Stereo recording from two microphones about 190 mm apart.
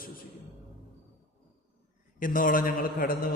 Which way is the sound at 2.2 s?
45° left (ahead or behind).